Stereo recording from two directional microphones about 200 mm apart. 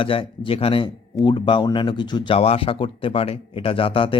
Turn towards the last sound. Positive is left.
turn(degrees=25)  # may be behind; listen again after turning